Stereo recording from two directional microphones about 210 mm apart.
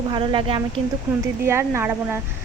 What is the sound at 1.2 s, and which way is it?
A woman's voice, 10° right (ahead or behind).